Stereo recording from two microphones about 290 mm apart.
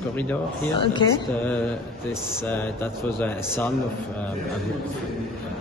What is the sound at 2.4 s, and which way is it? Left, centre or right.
Speech, centre.